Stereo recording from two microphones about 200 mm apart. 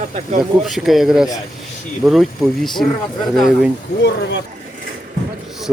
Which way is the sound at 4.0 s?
60° left (ahead or behind).